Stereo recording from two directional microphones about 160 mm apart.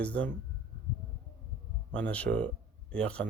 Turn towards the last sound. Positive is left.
turn(degrees=5)  # may be behind; listen again after turning